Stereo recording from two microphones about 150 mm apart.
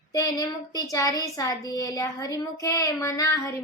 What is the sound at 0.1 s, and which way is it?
A woman's voice, 25° left (ahead or behind).